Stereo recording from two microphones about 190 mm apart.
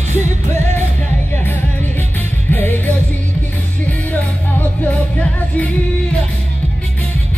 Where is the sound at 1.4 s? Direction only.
10° left (ahead or behind).